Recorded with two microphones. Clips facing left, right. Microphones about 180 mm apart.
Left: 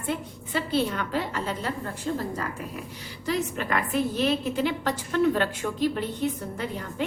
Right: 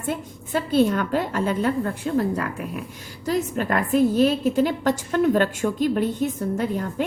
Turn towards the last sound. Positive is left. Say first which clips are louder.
# right 7 dB
turn(degrees=-45)  # may be behind; listen again after turning